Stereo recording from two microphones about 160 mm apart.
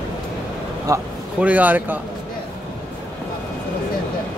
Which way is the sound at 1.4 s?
10° right (ahead or behind).